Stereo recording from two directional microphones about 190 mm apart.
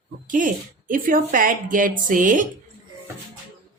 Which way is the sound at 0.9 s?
45° right (ahead or behind).